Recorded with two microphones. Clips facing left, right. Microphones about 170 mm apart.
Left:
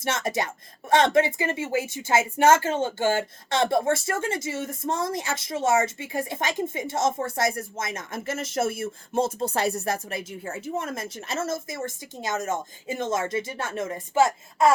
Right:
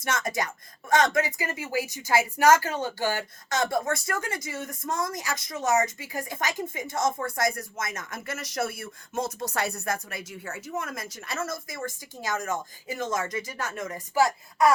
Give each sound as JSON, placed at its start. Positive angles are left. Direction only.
{"t": 0.0, "sound": "speech", "side_deg": 25}